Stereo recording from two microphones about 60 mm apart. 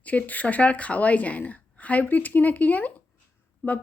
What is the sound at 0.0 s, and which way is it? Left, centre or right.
A woman's voice, left.